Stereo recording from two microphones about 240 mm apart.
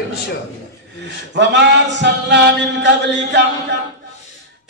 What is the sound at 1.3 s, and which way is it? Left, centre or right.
Speech, right.